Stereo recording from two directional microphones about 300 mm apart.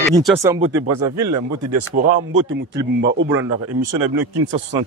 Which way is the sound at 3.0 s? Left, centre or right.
Right.